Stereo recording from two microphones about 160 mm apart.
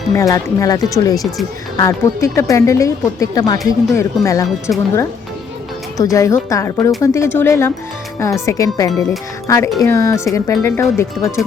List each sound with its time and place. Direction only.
0.1 s speech: 20° left (ahead or behind)
6.0 s speech: 20° left (ahead or behind)